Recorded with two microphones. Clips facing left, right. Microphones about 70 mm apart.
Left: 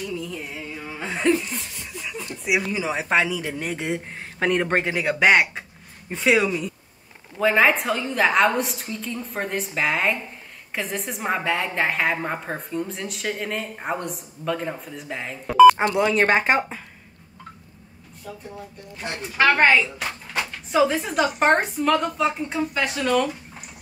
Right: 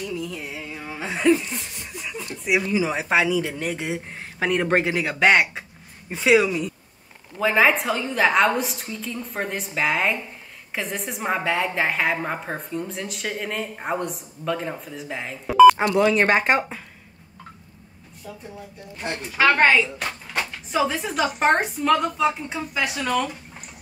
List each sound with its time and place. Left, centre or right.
0.2 s a sound: centre
1.6 s snicker: right
2.0 s a woman's voice: centre
19.3 s a woman's voice: centre